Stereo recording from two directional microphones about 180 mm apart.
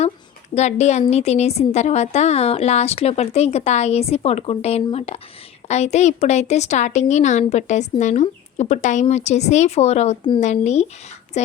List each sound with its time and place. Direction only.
0.5 s a woman's voice: 40° left (ahead or behind)